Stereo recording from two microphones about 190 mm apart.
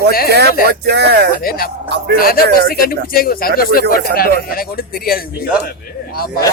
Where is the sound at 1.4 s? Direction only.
50° left (ahead or behind).